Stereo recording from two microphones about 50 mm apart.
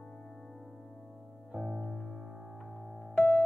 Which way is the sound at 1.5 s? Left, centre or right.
Centre.